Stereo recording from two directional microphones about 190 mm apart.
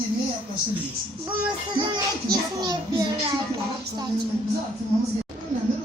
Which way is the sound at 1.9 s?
20° right (ahead or behind).